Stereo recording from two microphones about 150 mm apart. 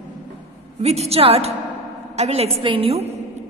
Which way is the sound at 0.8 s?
45° right (ahead or behind).